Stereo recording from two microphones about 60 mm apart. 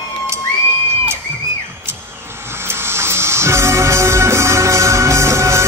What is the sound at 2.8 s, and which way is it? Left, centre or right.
Music, right.